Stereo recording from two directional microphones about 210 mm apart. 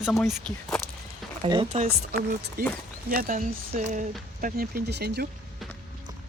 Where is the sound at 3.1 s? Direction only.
40° right (ahead or behind).